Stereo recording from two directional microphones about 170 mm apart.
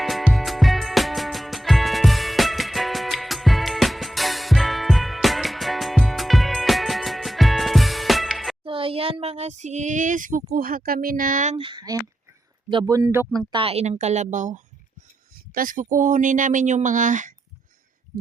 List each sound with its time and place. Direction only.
0.0 s music: centre (ahead or behind)
8.6 s speech: 30° right (ahead or behind); by 11.5 s 50° right (ahead or behind)
11.5 s speech: 30° right (ahead or behind)
13.5 s a woman's voice: 35° right (ahead or behind); by 17.3 s 50° right (ahead or behind)